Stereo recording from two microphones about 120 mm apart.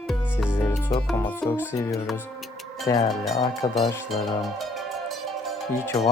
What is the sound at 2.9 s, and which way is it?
Speech, 25° left (ahead or behind).